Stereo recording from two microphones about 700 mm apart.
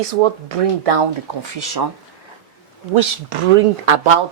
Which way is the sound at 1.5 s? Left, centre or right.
Right.